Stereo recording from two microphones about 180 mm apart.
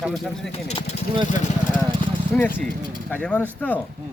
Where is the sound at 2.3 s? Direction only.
10° left (ahead or behind).